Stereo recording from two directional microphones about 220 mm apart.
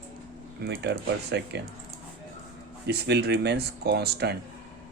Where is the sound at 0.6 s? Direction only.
45° right (ahead or behind).